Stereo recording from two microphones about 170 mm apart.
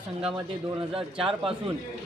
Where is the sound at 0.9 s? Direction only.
30° right (ahead or behind).